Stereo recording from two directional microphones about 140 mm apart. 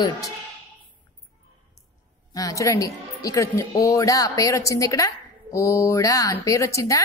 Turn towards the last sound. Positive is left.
turn(degrees=25)  # may be behind; listen again after turning